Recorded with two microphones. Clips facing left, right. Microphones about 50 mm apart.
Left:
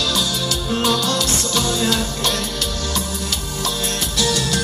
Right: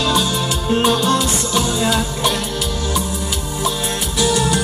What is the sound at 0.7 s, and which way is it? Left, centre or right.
Music, right.